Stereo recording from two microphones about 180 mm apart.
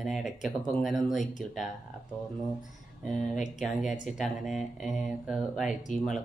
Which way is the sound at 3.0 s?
Centre (ahead or behind).